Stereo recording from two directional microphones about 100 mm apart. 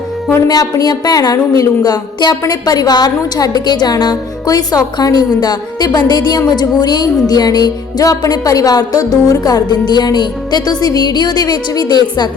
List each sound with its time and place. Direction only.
0.4 s a woman's voice: 35° left (ahead or behind)